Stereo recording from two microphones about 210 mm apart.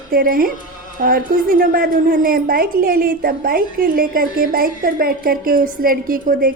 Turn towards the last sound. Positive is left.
turn(degrees=-45)  # may be behind; listen again after turning